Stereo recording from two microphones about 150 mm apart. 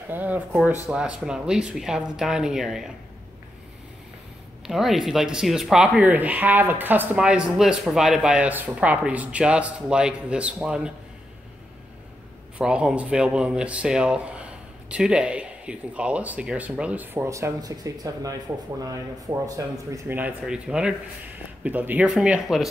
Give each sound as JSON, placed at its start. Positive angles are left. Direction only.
{"t": 0.1, "sound": "speech", "side_deg": -10}
{"t": 4.6, "sound": "speech", "side_deg": 0}
{"t": 12.5, "sound": "speech", "side_deg": -5}
{"t": 20.2, "sound": "speech", "side_deg": -10}